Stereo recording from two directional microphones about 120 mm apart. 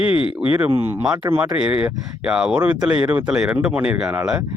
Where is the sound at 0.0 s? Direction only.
50° left (ahead or behind).